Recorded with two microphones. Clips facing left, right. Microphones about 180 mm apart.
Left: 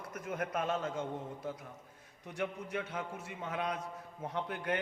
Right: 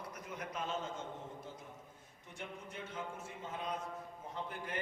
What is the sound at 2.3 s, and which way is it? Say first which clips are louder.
A man's voice: left 10 dB; 70° left (ahead or behind).